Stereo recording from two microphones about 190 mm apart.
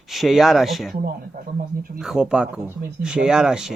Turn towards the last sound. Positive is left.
turn(degrees=-5)  # may be behind; listen again after turning